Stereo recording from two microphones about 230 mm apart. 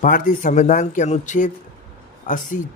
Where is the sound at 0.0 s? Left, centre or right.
Left.